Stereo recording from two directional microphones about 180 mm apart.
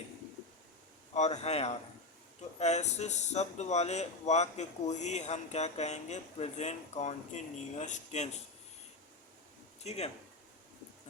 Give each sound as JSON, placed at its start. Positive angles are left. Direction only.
{"t": 1.1, "sound": "speech", "side_deg": 40}
{"t": 9.8, "sound": "speech", "side_deg": 35}